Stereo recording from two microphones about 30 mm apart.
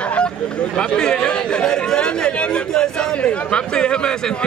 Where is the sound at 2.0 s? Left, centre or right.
Left.